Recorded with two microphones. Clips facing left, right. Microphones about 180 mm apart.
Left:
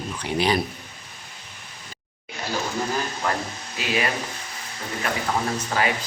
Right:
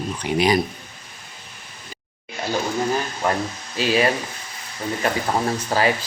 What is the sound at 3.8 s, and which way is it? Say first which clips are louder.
Speech: right 8 dB; 30° right (ahead or behind).